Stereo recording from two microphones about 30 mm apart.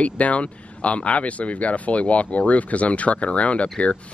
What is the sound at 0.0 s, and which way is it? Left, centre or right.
Speech, left.